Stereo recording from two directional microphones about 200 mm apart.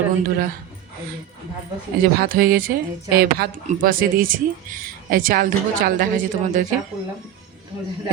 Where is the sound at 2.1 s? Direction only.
50° right (ahead or behind).